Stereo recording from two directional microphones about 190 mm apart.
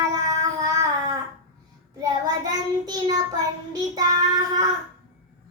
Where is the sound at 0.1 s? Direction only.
20° right (ahead or behind).